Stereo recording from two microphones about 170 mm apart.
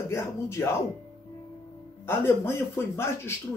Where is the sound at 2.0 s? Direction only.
15° left (ahead or behind).